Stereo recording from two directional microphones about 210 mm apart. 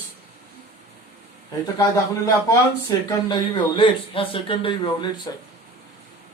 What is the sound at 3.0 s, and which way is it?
A man's voice, 20° left (ahead or behind).